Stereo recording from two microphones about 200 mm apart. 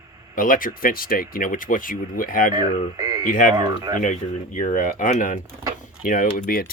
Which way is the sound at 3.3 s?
40° left (ahead or behind).